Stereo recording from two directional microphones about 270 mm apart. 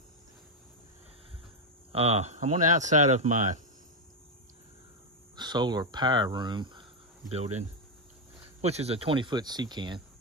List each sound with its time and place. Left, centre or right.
1.9 s speech: right
5.3 s speech: centre